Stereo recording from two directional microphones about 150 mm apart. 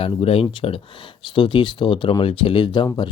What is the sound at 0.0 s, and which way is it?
Speech, 40° left (ahead or behind).